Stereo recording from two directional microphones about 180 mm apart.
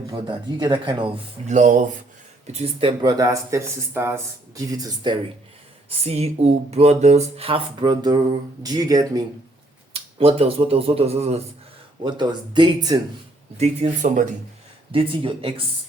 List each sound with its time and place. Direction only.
0.1 s speech: 25° right (ahead or behind)
1.5 s speech: 45° right (ahead or behind)
3.0 s speech: 20° right (ahead or behind)
6.1 s speech: 35° right (ahead or behind); by 9.2 s 20° right (ahead or behind)
9.9 s speech: 30° right (ahead or behind)
12.0 s speech: 25° right (ahead or behind)
13.6 s speech: 40° right (ahead or behind)
14.9 s speech: 30° right (ahead or behind)